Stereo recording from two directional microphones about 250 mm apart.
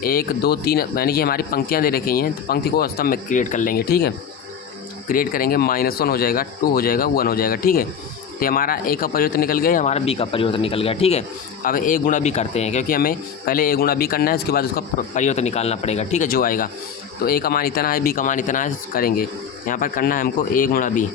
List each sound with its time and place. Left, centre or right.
0.0 s speech: left
11.6 s speech: left